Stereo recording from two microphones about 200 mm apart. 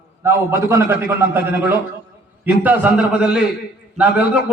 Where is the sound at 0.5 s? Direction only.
15° right (ahead or behind).